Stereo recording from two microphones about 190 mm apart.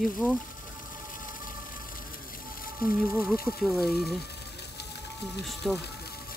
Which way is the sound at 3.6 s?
Centre (ahead or behind).